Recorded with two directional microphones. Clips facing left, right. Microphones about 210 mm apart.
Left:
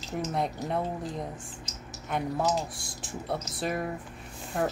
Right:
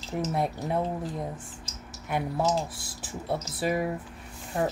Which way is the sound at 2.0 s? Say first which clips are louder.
Right 1 dB; 10° right (ahead or behind).